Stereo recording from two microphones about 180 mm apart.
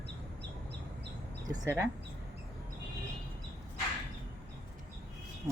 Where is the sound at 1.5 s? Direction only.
15° right (ahead or behind).